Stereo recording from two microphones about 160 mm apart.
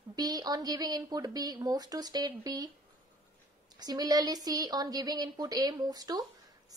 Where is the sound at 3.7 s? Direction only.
25° right (ahead or behind).